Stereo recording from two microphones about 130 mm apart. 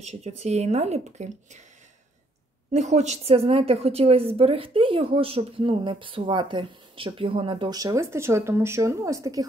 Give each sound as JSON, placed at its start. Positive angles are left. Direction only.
{"t": 0.0, "sound": "speech", "side_deg": -55}
{"t": 2.7, "sound": "a woman's voice", "side_deg": -60}
{"t": 7.7, "sound": "speech", "side_deg": -25}